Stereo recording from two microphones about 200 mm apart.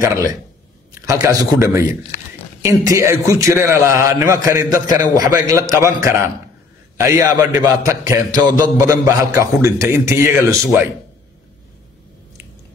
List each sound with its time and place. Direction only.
0.0 s a man's voice: 15° right (ahead or behind)